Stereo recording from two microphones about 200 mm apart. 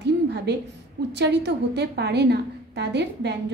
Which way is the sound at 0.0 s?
55° right (ahead or behind).